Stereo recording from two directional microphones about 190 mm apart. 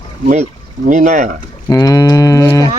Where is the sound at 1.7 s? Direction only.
20° left (ahead or behind).